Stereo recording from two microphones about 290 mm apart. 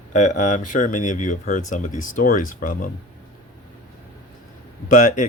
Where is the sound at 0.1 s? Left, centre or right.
Left.